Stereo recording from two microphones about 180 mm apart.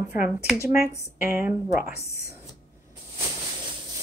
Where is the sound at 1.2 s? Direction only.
10° right (ahead or behind).